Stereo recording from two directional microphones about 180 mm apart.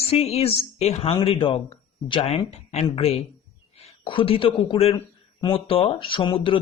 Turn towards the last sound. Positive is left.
turn(degrees=30)  # may be behind; listen again after turning